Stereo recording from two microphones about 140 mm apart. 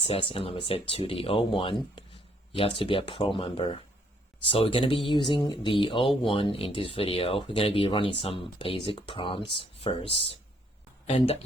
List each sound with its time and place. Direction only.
0.0 s speech: 40° left (ahead or behind)